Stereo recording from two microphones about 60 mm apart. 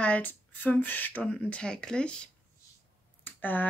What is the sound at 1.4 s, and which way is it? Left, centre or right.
Speech, centre.